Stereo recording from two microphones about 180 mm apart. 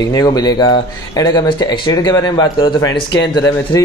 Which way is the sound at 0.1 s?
20° left (ahead or behind).